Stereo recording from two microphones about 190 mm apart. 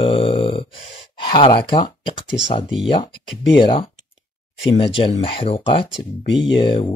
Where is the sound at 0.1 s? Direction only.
30° left (ahead or behind).